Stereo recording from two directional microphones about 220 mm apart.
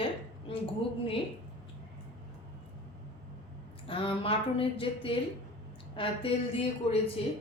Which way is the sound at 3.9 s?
25° left (ahead or behind).